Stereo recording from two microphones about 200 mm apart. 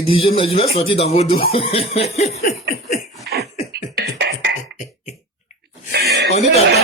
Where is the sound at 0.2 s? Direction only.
30° left (ahead or behind).